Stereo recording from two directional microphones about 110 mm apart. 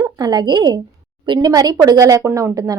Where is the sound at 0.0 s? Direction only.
40° right (ahead or behind).